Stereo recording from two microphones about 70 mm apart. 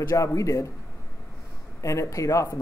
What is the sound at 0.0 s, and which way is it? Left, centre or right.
Speech, left.